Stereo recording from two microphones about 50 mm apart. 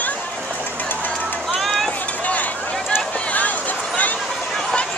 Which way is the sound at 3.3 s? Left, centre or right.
Left.